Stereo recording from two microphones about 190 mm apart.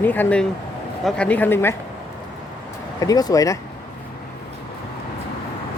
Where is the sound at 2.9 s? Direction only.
20° left (ahead or behind).